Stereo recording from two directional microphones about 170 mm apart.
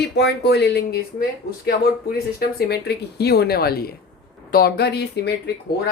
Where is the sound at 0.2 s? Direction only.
75° left (ahead or behind).